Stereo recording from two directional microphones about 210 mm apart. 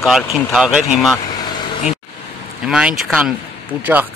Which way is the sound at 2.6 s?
Centre (ahead or behind).